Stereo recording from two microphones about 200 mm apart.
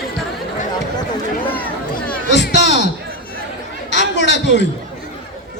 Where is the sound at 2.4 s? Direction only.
60° left (ahead or behind).